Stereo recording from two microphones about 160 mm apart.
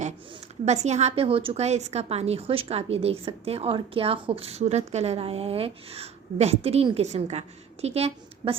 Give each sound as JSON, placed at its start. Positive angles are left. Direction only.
{"t": 0.6, "sound": "a woman's voice", "side_deg": -45}